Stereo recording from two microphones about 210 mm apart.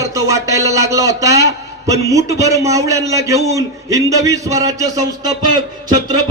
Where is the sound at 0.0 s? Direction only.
15° right (ahead or behind).